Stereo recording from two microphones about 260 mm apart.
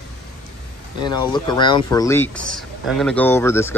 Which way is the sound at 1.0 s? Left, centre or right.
Centre.